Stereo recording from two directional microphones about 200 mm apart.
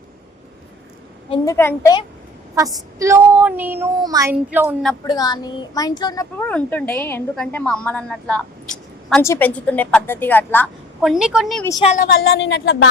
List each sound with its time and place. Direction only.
1.5 s a woman's voice: 15° left (ahead or behind)
3.0 s speech: 10° right (ahead or behind)
5.0 s speech: 20° left (ahead or behind)
6.3 s a woman's voice: 5° left (ahead or behind)
11.0 s a woman's voice: 5° right (ahead or behind)
12.0 s speech: 70° left (ahead or behind)